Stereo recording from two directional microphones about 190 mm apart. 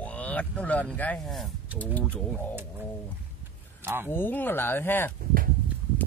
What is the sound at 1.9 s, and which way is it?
Speech, 5° left (ahead or behind).